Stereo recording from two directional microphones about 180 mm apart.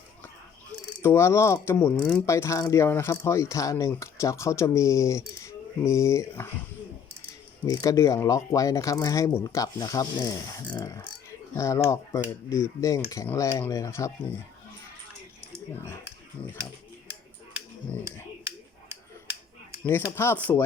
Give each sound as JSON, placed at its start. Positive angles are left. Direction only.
{"t": 1.0, "sound": "speech", "side_deg": 15}
{"t": 7.7, "sound": "speech", "side_deg": 20}
{"t": 17.5, "sound": "a sound", "side_deg": -15}
{"t": 20.1, "sound": "speech", "side_deg": 15}